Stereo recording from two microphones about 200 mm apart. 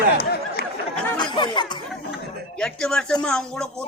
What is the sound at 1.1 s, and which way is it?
Chatter, 20° left (ahead or behind).